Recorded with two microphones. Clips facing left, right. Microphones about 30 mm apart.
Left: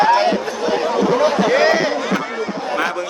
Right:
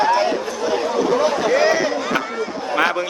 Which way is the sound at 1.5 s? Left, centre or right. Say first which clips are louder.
Even; left.